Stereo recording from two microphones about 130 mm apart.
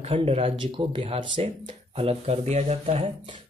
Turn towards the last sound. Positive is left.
turn(degrees=-55)  # may be behind; listen again after turning